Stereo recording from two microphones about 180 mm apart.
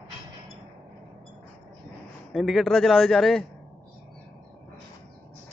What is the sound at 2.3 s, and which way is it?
A man's voice, centre (ahead or behind).